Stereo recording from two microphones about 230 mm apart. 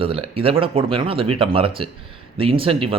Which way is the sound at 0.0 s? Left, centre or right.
Right.